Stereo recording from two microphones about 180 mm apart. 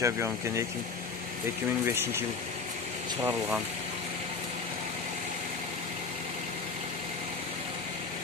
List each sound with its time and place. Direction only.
0.0 s speech: 15° right (ahead or behind)
3.2 s speech: 10° right (ahead or behind)